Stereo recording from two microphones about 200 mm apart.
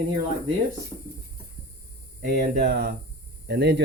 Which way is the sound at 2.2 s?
50° right (ahead or behind).